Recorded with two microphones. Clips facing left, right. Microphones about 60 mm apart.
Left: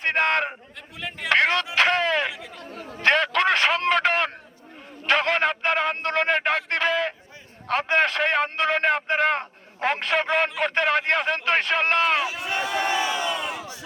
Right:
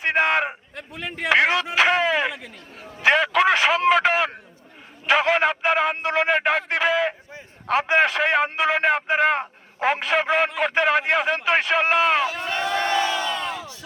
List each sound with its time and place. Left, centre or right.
0.0 s a sound: centre
0.8 s speech: right
1.3 s music: centre
3.0 s a sound: centre
7.7 s a man's voice: centre
12.3 s crowd: centre